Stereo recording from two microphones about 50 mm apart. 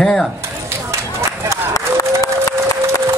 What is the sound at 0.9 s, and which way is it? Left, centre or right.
Run, right.